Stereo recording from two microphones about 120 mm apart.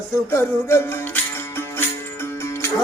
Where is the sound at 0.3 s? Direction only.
20° left (ahead or behind).